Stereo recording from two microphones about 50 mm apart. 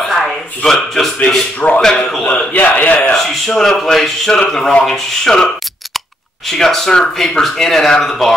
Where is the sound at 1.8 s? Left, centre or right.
Centre.